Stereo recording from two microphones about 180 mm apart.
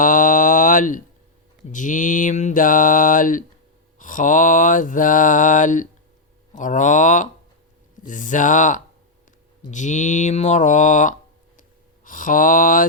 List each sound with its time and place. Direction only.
0.0 s a sound: 45° left (ahead or behind)
1.7 s mantra: 45° left (ahead or behind)
12.0 s speech: 50° left (ahead or behind)